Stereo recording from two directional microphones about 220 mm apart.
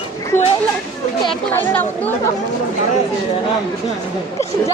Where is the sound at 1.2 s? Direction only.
10° left (ahead or behind).